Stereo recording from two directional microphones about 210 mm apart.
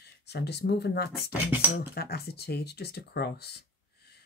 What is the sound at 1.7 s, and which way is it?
Speech, 50° left (ahead or behind).